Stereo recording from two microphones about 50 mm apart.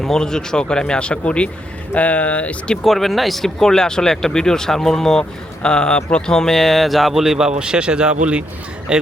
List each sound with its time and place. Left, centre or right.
0.0 s speech: centre; by 2.7 s left
2.8 s speech: centre